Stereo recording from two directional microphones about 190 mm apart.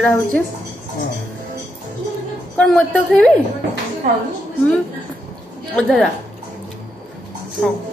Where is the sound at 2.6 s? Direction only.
5° left (ahead or behind).